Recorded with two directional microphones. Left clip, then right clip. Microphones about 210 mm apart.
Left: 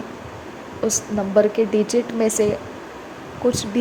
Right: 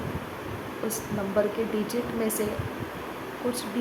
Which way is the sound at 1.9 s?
30° left (ahead or behind).